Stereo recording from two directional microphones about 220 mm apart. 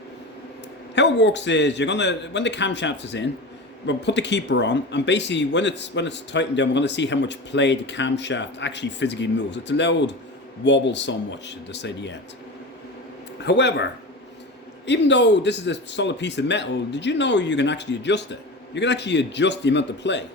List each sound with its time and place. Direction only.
0.9 s speech: 50° left (ahead or behind)
13.4 s speech: 50° left (ahead or behind)
14.8 s speech: 55° left (ahead or behind)